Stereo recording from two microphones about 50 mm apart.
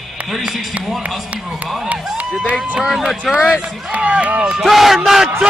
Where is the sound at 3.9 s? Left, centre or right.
Right.